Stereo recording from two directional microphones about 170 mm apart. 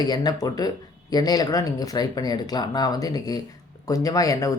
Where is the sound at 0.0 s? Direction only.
25° left (ahead or behind).